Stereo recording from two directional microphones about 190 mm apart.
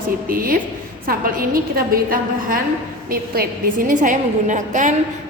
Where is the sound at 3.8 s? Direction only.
45° right (ahead or behind).